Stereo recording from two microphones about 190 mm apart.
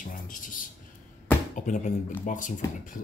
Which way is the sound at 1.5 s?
40° left (ahead or behind).